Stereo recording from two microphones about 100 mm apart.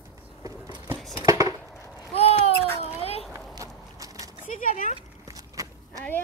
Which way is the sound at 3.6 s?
35° right (ahead or behind).